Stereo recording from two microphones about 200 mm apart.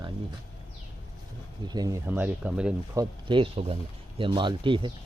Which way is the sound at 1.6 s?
20° right (ahead or behind).